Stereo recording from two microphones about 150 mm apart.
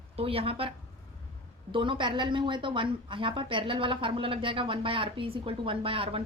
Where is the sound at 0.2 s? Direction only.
40° right (ahead or behind).